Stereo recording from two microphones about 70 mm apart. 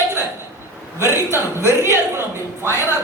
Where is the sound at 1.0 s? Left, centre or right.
Right.